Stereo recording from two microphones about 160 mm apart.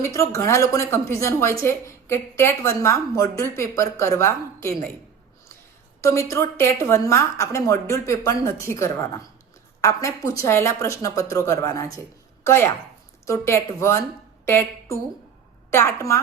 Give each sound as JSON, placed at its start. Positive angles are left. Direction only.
{"t": 0.0, "sound": "a woman's voice", "side_deg": 20}
{"t": 6.0, "sound": "a woman's voice", "side_deg": 20}